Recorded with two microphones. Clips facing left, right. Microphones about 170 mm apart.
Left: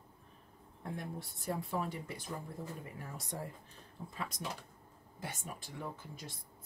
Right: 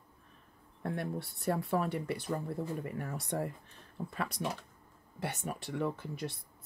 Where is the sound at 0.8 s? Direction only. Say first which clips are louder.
Right 6 dB; 70° right (ahead or behind).